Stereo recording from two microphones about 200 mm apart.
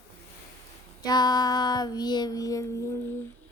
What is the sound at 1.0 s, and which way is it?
Child singing, 20° left (ahead or behind).